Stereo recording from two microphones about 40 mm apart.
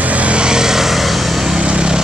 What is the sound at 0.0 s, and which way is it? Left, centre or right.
Vehicle, right.